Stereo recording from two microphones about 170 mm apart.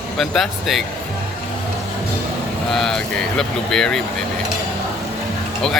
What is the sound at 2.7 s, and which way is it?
Speech, centre (ahead or behind).